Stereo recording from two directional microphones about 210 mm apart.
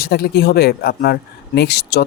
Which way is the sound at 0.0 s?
45° left (ahead or behind).